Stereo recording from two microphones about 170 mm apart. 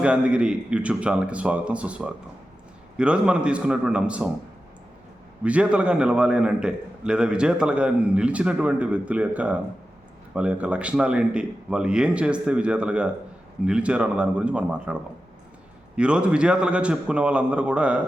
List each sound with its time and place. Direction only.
0.0 s a man's voice: 5° right (ahead or behind)
5.4 s a man's voice: 5° right (ahead or behind)